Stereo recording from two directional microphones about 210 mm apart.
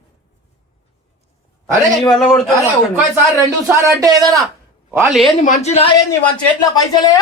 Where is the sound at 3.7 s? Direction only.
15° right (ahead or behind).